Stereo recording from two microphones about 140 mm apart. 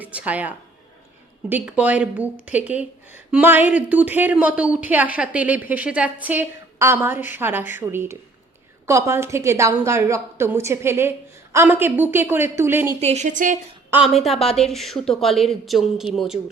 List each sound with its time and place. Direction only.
0.0 s a woman's voice: 10° right (ahead or behind)
13.0 s speech: 50° right (ahead or behind); by 13.6 s 65° right (ahead or behind)
14.2 s a woman's voice: centre (ahead or behind)